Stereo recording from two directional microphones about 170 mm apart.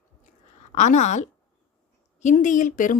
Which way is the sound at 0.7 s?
45° left (ahead or behind).